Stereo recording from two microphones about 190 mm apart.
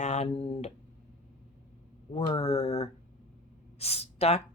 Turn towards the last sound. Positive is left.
turn(degrees=35)  # may be behind; listen again after turning